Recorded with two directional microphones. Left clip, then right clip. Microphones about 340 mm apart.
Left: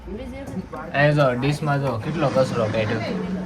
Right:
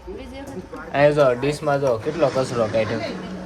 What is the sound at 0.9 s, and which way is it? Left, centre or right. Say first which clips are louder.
Speech: right 3 dB; centre.